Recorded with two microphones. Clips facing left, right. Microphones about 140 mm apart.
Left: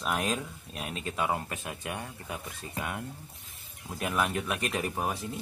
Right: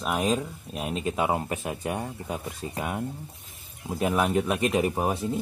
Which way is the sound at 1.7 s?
35° right (ahead or behind).